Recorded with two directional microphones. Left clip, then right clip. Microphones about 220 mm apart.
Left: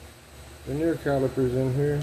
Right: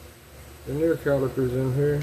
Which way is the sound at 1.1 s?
Centre (ahead or behind).